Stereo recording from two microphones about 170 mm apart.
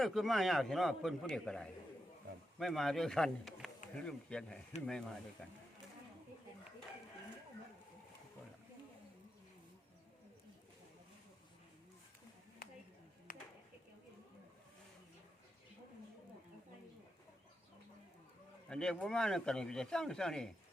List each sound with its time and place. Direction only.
0.0 s speech: centre (ahead or behind)
12.6 s a sound: 60° left (ahead or behind)
18.7 s speech: 5° left (ahead or behind)